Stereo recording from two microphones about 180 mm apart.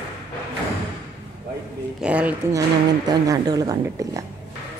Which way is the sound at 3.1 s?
20° right (ahead or behind).